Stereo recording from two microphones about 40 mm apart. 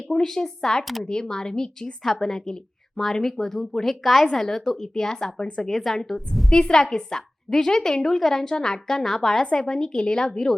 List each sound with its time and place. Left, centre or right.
0.1 s a woman's voice: centre
6.5 s a woman's voice: centre